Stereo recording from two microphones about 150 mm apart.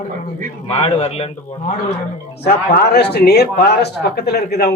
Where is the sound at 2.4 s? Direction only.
90° left.